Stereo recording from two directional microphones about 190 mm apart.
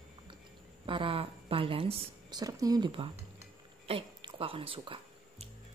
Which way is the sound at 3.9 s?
25° right (ahead or behind).